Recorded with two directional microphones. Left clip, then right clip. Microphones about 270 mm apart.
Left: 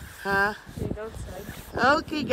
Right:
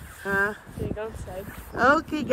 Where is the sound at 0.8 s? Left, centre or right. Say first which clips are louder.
Right 2 dB; right.